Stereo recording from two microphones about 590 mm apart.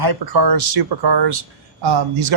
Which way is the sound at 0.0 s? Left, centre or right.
Right.